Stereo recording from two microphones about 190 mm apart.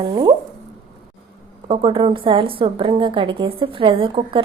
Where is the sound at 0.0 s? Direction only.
25° right (ahead or behind).